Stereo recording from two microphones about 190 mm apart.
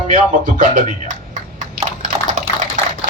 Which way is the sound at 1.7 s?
40° right (ahead or behind).